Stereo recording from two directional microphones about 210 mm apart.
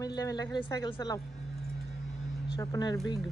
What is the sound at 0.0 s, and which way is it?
Speech, 15° left (ahead or behind).